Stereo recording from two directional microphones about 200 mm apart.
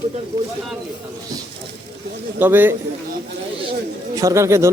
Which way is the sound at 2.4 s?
10° right (ahead or behind).